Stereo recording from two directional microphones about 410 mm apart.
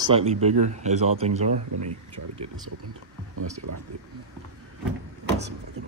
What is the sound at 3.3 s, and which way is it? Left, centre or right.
Speech, right.